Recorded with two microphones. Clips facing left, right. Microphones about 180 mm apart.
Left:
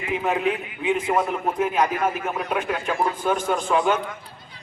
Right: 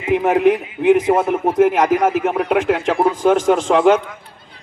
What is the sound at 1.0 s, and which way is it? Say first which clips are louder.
Speech: right 7 dB; 45° right (ahead or behind).